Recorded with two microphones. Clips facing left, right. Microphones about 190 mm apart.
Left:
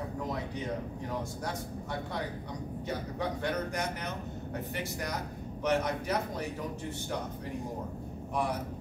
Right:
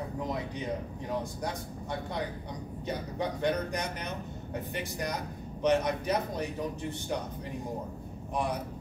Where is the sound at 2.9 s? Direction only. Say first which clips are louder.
Right 2 dB; 20° right (ahead or behind).